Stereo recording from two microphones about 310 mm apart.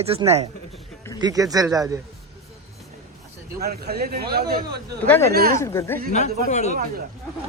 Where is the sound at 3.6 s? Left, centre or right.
Right.